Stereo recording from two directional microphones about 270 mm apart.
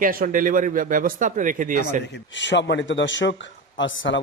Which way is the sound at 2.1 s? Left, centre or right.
Left.